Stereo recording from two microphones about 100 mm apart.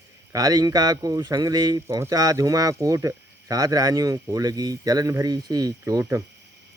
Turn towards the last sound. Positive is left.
turn(degrees=-35)  # may be behind; listen again after turning